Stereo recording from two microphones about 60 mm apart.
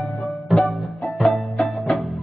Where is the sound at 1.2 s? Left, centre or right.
Centre.